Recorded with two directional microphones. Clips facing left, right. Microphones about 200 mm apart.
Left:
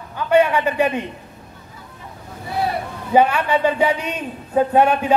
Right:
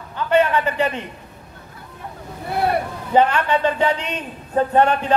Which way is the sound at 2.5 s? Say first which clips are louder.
Right 2 dB; 60° right (ahead or behind).